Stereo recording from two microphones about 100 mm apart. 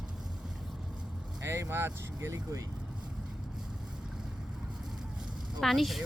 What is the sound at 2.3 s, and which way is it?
Speech, 35° right (ahead or behind).